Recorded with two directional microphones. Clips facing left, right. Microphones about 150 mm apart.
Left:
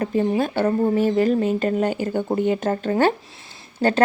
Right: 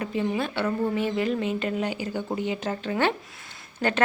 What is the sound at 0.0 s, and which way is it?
Speech, 40° left (ahead or behind).